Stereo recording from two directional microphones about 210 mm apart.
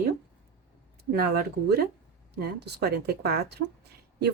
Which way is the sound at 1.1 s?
50° right (ahead or behind).